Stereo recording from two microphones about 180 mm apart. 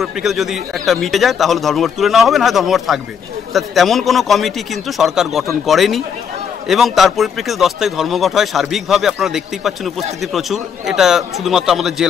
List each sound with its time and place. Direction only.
0.0 s speech: centre (ahead or behind)